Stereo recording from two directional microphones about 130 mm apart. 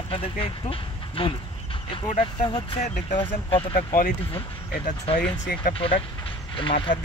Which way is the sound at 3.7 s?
90° left.